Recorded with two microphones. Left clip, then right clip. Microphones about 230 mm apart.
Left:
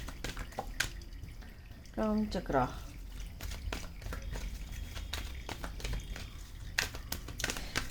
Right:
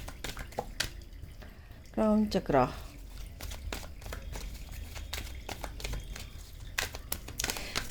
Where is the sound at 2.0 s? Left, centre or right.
Right.